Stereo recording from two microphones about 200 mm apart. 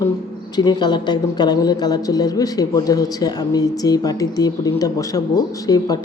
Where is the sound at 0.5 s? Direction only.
20° left (ahead or behind).